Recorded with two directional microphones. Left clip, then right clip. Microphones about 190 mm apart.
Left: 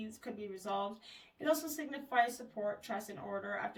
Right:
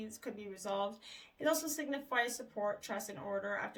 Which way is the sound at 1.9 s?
45° right (ahead or behind).